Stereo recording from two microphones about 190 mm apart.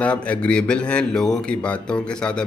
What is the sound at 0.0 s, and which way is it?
A man's voice, 5° left (ahead or behind).